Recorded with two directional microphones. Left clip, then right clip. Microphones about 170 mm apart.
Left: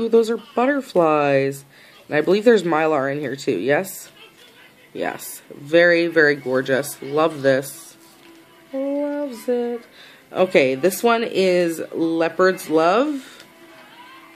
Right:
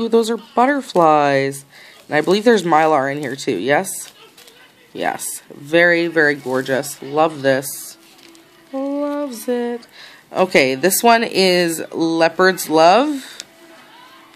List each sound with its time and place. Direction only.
0.0 s speech: 20° right (ahead or behind)
4.9 s speech: 20° right (ahead or behind)
8.7 s speech: 40° right (ahead or behind)